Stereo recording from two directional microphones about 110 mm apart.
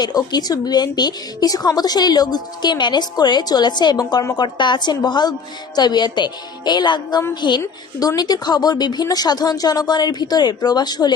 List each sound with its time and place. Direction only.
0.0 s a woman's voice: 40° left (ahead or behind)